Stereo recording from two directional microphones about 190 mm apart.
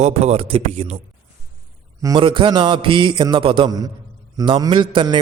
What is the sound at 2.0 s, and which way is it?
A man's voice, 20° right (ahead or behind).